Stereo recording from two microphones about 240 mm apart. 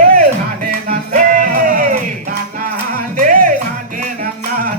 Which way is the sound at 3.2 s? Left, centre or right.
Right.